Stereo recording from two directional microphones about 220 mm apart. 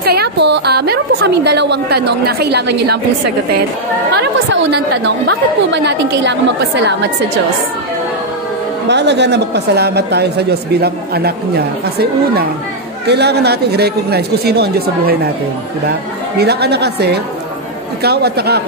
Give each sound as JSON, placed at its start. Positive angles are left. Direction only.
{"t": 0.0, "sound": "a woman's voice", "side_deg": -45}
{"t": 8.8, "sound": "speech", "side_deg": -50}
{"t": 16.3, "sound": "speech", "side_deg": -45}